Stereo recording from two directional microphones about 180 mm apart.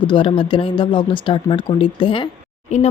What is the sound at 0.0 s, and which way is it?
Speech, 25° left (ahead or behind).